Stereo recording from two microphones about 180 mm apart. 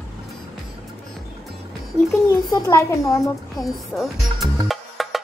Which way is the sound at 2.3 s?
15° left (ahead or behind).